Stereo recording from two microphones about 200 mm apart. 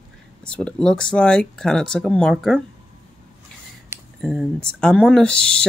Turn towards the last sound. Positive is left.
turn(degrees=5)  # may be behind; listen again after turning